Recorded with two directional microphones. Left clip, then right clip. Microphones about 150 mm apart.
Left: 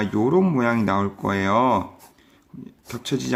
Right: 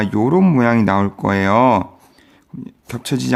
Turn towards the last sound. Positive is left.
turn(degrees=-40)  # may be behind; listen again after turning